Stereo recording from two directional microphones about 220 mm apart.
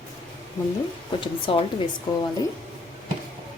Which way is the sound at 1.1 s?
25° left (ahead or behind).